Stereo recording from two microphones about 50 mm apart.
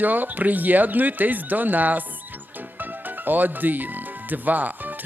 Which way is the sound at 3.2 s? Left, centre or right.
Right.